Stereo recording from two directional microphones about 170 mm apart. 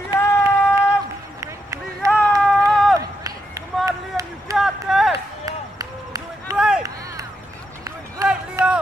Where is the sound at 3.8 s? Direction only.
20° right (ahead or behind).